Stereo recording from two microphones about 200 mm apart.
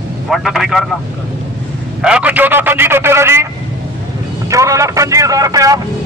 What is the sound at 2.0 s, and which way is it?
A man's voice, 5° right (ahead or behind).